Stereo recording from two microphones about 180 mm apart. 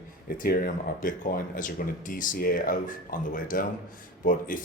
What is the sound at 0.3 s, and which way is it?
Speech, 55° left (ahead or behind).